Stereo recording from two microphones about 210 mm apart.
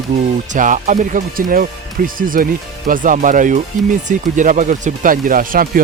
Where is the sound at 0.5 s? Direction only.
40° right (ahead or behind).